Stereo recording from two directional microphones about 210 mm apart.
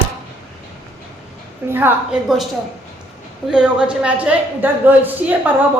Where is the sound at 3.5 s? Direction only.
5° right (ahead or behind).